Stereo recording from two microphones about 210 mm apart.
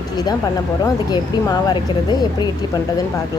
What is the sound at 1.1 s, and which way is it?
Speech, 20° left (ahead or behind).